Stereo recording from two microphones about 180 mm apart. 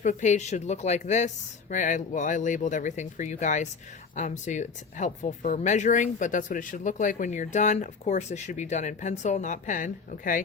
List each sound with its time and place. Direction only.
0.0 s speech: 45° left (ahead or behind)